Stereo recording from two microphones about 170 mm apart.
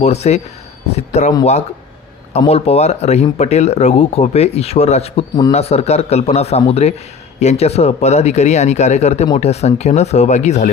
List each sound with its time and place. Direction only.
0.0 s speech: 40° left (ahead or behind)
2.5 s speech: 35° left (ahead or behind)